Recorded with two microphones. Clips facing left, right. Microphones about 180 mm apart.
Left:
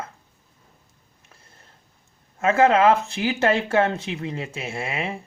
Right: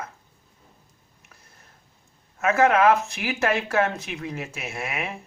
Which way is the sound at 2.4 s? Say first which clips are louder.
Left 2 dB; 30° left (ahead or behind).